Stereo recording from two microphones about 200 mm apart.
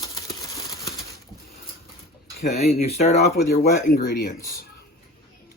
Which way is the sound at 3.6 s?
50° left (ahead or behind).